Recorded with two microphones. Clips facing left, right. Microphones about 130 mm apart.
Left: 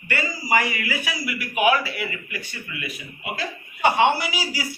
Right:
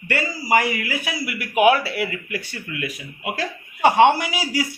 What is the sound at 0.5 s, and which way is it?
Speech, 50° right (ahead or behind).